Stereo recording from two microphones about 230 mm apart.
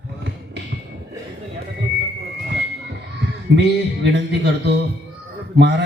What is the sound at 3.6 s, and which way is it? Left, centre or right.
Speech, right.